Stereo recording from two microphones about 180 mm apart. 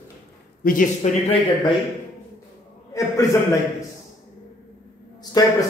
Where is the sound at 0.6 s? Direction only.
45° left (ahead or behind).